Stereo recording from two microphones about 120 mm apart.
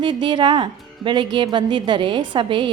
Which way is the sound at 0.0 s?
40° right (ahead or behind).